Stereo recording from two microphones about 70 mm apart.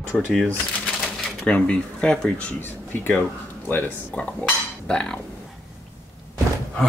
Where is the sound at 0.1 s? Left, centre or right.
Centre.